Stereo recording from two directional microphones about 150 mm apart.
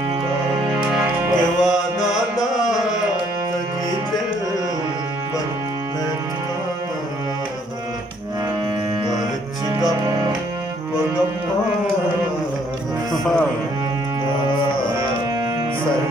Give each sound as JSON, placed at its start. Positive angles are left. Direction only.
{"t": 0.7, "sound": "music", "side_deg": -5}
{"t": 9.8, "sound": "music", "side_deg": -25}
{"t": 13.1, "sound": "music", "side_deg": 0}